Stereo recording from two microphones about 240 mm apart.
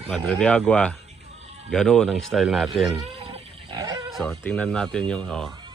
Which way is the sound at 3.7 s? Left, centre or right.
Centre.